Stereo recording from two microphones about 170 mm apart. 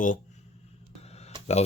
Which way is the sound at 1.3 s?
25° right (ahead or behind).